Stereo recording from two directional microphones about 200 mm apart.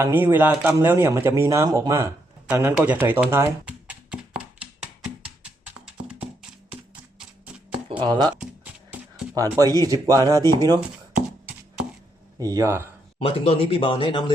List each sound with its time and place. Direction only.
0.0 s speech: 10° right (ahead or behind)
5.4 s music: 5° right (ahead or behind)
7.9 s speech: 25° right (ahead or behind)
8.4 s a sound: 5° right (ahead or behind)
9.3 s speech: 15° right (ahead or behind)
12.4 s speech: 15° right (ahead or behind)
13.1 s speech: 30° left (ahead or behind)